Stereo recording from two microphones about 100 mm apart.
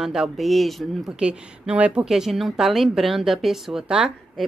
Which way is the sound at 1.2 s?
10° right (ahead or behind).